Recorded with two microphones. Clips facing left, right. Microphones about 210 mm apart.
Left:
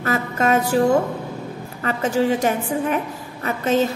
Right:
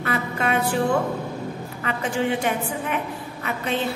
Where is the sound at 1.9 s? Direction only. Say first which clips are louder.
Left 5 dB; 40° left (ahead or behind).